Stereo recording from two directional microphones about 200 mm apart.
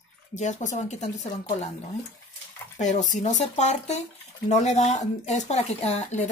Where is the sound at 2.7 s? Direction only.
35° left (ahead or behind).